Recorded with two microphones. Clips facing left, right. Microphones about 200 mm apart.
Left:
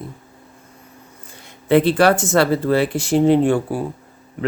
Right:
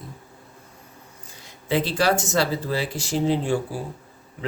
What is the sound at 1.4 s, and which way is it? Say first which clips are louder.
Speech: left 9 dB; 60° left (ahead or behind).